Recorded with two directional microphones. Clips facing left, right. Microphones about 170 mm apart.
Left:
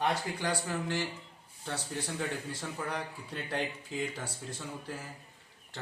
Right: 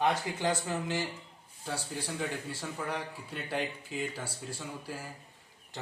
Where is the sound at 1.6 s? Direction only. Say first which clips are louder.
Even; 5° right (ahead or behind).